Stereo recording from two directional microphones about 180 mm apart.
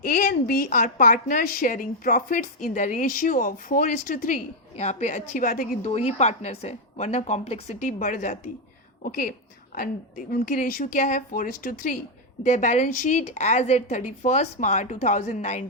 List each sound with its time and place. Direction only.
0.0 s a woman's voice: 50° left (ahead or behind)